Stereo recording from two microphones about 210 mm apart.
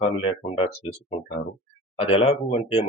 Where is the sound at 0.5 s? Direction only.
30° left (ahead or behind).